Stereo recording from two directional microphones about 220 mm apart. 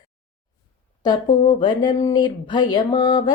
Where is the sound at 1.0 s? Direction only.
20° left (ahead or behind).